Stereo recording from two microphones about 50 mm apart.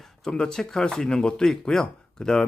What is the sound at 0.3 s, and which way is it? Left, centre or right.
Speech, centre.